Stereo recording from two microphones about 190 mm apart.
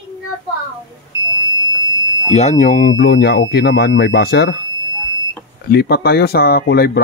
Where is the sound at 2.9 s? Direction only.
60° left (ahead or behind).